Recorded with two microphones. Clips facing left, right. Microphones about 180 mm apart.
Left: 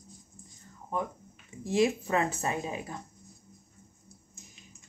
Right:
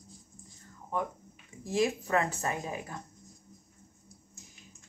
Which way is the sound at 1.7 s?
20° left (ahead or behind).